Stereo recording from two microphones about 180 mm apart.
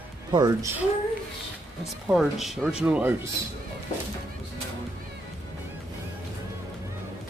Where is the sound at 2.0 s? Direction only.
Centre (ahead or behind).